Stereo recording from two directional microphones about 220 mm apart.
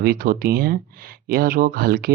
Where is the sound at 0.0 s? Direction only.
40° right (ahead or behind).